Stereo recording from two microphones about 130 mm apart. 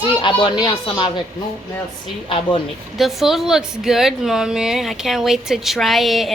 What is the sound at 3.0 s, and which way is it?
A woman's voice, centre (ahead or behind).